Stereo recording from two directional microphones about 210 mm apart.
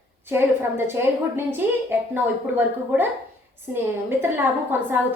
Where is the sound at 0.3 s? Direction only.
10° right (ahead or behind).